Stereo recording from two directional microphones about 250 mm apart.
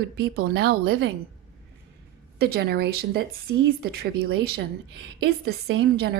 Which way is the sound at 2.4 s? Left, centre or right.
Right.